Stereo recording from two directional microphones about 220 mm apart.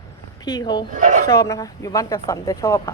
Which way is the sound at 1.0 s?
35° right (ahead or behind).